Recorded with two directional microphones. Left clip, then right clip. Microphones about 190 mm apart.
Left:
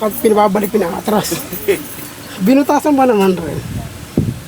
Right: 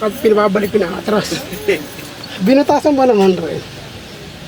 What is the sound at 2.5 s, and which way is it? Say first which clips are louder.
Speech: right 1 dB; 40° left (ahead or behind).